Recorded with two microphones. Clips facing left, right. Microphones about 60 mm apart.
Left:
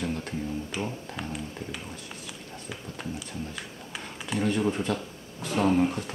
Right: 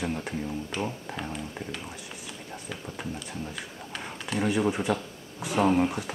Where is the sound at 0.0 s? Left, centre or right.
Centre.